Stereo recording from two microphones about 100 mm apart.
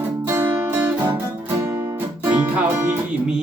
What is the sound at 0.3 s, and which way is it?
Music, 25° right (ahead or behind).